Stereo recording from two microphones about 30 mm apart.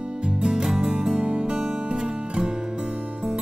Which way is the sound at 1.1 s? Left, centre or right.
Right.